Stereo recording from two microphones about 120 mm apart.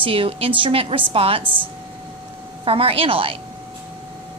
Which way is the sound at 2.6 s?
50° right (ahead or behind).